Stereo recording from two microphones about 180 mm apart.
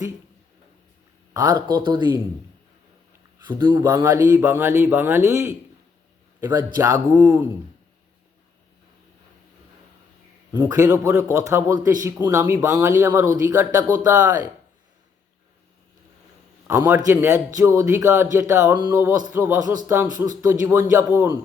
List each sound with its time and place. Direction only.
1.3 s speech: 20° right (ahead or behind)
3.7 s a man's voice: 20° right (ahead or behind)
10.5 s a man's voice: 15° right (ahead or behind)
16.6 s a man's voice: 15° right (ahead or behind)